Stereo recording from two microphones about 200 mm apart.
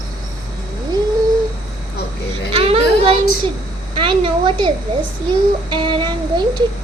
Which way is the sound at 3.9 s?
25° right (ahead or behind).